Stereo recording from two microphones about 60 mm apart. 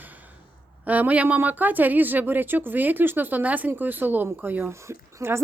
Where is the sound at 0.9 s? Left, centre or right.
Right.